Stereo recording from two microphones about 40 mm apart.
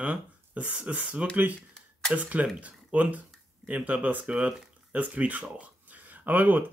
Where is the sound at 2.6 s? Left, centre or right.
Right.